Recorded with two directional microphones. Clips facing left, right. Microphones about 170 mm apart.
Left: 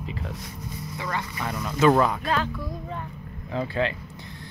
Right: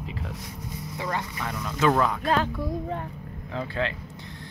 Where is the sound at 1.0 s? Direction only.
35° right (ahead or behind).